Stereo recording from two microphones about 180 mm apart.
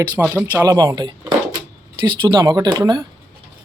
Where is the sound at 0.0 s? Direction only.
10° right (ahead or behind).